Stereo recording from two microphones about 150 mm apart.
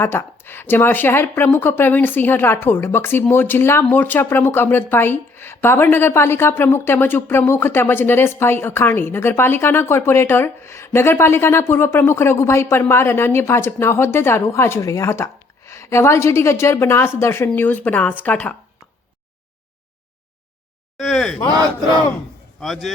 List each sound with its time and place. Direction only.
0.0 s speech: 15° left (ahead or behind)
21.0 s speech: centre (ahead or behind)
22.6 s speech: centre (ahead or behind)